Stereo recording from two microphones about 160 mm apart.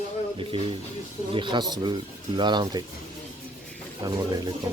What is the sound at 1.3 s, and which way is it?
Speech, 30° right (ahead or behind).